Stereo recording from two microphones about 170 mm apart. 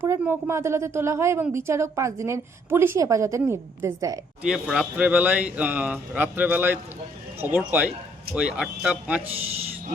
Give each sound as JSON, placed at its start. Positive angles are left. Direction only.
{"t": 0.0, "sound": "a woman's voice", "side_deg": -15}
{"t": 4.4, "sound": "a woman's voice", "side_deg": -5}